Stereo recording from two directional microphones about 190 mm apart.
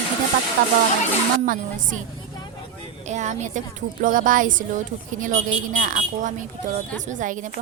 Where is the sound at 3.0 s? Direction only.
40° right (ahead or behind).